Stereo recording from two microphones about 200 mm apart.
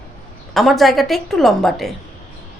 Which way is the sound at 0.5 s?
Centre (ahead or behind).